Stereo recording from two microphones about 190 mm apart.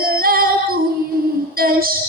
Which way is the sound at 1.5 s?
50° right (ahead or behind).